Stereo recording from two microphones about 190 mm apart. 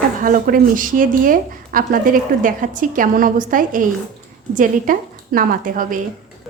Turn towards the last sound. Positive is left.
turn(degrees=-45)  # may be behind; listen again after turning